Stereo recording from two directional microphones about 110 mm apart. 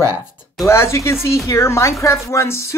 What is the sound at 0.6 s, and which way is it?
Speech, 25° left (ahead or behind).